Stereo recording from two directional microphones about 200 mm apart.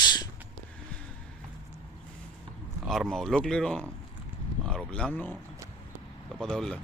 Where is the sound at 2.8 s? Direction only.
Centre (ahead or behind).